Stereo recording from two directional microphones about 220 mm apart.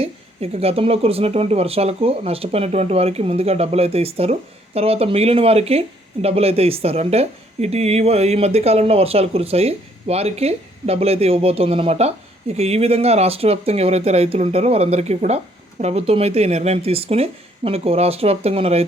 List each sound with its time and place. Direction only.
0.0 s a woman's voice: 25° right (ahead or behind)